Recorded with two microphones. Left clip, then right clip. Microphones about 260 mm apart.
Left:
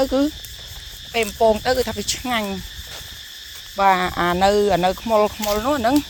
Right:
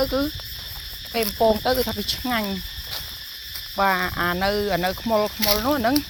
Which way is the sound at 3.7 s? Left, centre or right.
Left.